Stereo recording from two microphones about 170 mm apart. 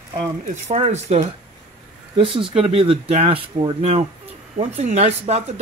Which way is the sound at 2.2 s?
30° right (ahead or behind).